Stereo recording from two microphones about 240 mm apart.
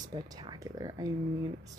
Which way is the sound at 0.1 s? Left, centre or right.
Centre.